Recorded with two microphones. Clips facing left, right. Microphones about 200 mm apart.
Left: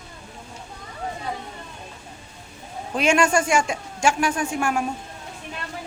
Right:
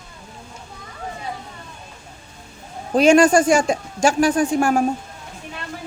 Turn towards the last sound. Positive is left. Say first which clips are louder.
# right 7 dB
turn(degrees=-35)  # may be behind; listen again after turning